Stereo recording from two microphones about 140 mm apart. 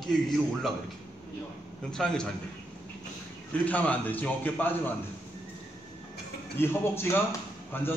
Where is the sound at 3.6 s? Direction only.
10° left (ahead or behind).